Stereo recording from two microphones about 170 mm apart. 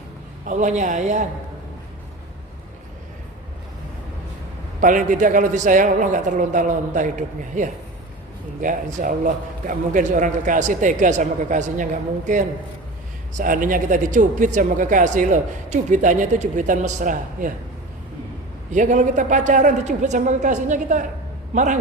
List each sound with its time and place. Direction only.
0.4 s speech: 45° right (ahead or behind)
4.8 s speech: 50° right (ahead or behind)
18.7 s a man's voice: 45° right (ahead or behind)